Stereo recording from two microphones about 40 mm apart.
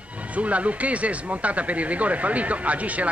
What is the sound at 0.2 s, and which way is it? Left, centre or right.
A man's voice, right.